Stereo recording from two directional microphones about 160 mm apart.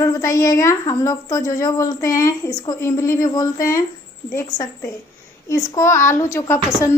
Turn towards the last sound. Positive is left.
turn(degrees=20)  # may be behind; listen again after turning